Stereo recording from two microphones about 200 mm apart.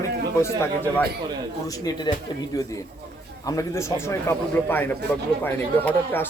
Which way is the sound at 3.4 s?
15° left (ahead or behind).